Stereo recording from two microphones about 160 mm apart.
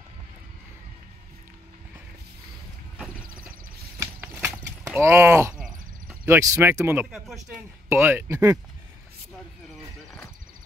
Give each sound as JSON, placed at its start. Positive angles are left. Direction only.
{"t": 4.0, "sound": "clip-clop", "side_deg": -15}
{"t": 4.9, "sound": "speech", "side_deg": -15}
{"t": 7.1, "sound": "speech", "side_deg": 0}
{"t": 7.5, "sound": "speech", "side_deg": -15}